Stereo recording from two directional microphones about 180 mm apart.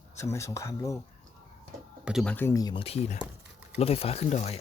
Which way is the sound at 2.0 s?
Centre (ahead or behind).